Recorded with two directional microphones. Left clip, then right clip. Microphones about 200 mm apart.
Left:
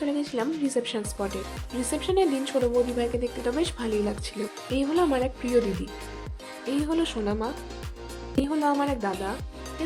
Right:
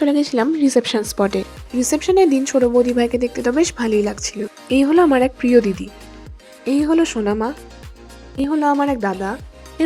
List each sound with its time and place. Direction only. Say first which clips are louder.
0.0 s speech: right 11 dB; 40° right (ahead or behind)